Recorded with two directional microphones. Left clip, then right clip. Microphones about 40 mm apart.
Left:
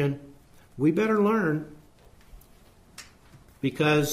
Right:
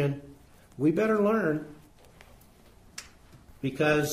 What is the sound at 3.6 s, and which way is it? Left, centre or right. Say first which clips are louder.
Speech: left 2 dB; left.